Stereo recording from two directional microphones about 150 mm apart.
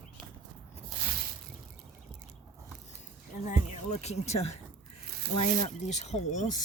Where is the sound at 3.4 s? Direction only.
50° left (ahead or behind).